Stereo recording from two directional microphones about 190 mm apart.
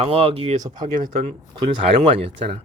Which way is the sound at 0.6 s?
20° right (ahead or behind).